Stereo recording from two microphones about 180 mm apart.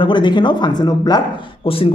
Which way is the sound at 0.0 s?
25° left (ahead or behind).